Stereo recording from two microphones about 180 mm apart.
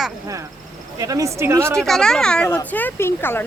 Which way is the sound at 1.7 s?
5° left (ahead or behind).